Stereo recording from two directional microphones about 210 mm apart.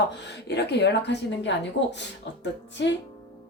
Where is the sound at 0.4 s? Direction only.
55° left (ahead or behind).